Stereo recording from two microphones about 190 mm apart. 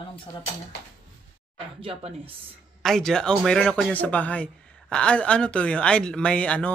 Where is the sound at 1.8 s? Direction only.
30° right (ahead or behind).